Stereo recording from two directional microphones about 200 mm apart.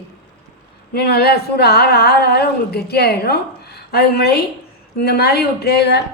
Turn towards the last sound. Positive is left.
turn(degrees=55)  # may be behind; listen again after turning